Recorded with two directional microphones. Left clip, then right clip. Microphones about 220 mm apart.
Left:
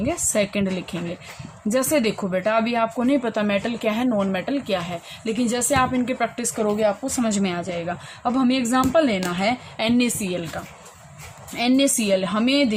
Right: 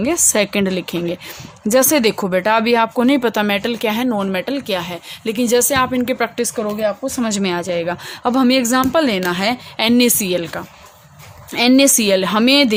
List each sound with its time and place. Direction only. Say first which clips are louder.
0.0 s speech: right 6 dB; 50° right (ahead or behind)